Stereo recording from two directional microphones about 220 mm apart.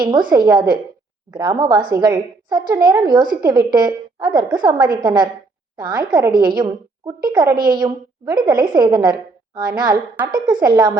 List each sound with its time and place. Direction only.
0.0 s a woman's voice: 20° right (ahead or behind)